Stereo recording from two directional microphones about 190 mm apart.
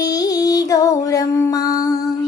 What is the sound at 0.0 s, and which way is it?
Music, 20° left (ahead or behind).